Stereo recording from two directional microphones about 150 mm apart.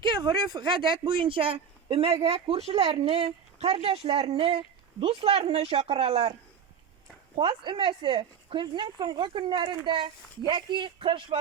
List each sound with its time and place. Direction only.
0.0 s speech: 30° right (ahead or behind)
7.3 s speech: 30° right (ahead or behind)